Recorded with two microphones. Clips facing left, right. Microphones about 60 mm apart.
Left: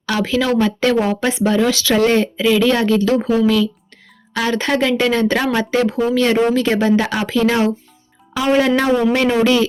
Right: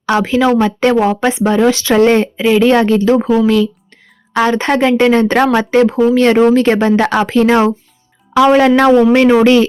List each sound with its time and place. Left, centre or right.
0.0 s speech: right